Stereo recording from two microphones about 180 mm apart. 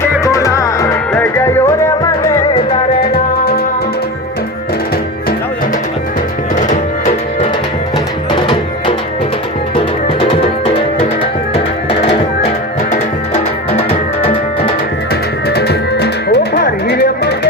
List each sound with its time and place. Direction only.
0.3 s music: 15° left (ahead or behind)
3.0 s music: 60° left (ahead or behind)
11.2 s music: 30° left (ahead or behind)
15.4 s music: 65° left (ahead or behind)